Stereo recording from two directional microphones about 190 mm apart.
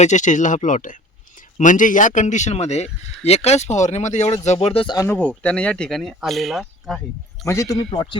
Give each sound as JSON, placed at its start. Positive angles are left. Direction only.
{"t": 0.0, "sound": "a man's voice", "side_deg": 40}
{"t": 5.0, "sound": "speech", "side_deg": 10}
{"t": 7.4, "sound": "a man's voice", "side_deg": 15}